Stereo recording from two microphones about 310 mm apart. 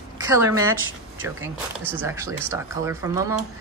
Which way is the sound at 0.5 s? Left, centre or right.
Right.